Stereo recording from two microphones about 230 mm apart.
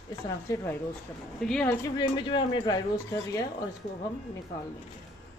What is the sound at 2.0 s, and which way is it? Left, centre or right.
Speech, centre.